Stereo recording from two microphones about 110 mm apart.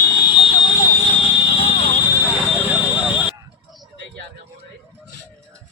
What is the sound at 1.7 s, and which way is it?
Vehicle, 65° left (ahead or behind).